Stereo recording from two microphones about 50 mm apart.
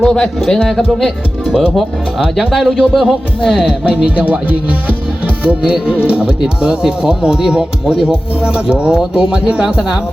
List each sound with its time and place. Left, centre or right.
0.0 s speech: centre
1.0 s speech: centre
1.7 s speech: centre